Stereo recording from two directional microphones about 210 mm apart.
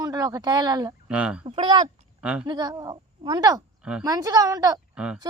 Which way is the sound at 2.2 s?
5° right (ahead or behind).